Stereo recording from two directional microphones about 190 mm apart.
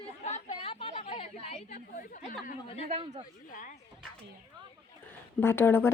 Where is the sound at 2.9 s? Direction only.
35° right (ahead or behind).